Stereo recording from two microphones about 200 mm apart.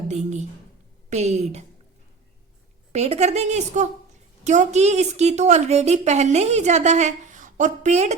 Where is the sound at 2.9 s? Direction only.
35° right (ahead or behind).